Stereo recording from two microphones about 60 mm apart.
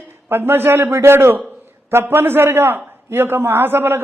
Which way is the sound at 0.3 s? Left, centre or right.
Right.